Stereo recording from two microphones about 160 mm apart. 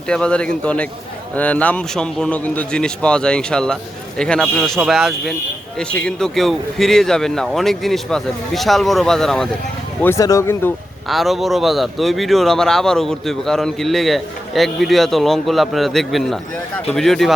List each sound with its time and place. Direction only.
0.1 s a man's voice: 5° left (ahead or behind)
10.0 s a man's voice: 20° left (ahead or behind)
11.1 s speech: centre (ahead or behind)